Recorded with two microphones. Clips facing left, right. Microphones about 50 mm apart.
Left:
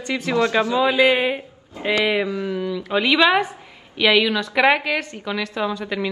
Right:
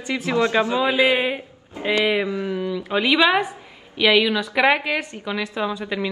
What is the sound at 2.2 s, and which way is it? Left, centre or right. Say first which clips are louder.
Mantra: even; right.